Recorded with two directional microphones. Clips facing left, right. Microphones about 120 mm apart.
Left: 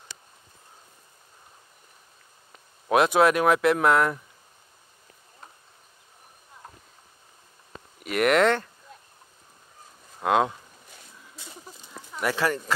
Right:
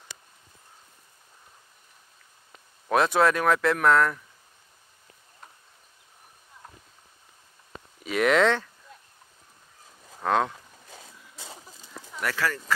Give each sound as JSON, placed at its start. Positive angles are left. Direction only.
{"t": 2.9, "sound": "speech", "side_deg": 15}
{"t": 8.1, "sound": "speech", "side_deg": 5}
{"t": 10.2, "sound": "speech", "side_deg": 10}
{"t": 12.2, "sound": "speech", "side_deg": 20}